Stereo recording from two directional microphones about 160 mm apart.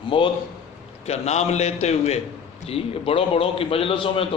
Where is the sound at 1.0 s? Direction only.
40° left (ahead or behind).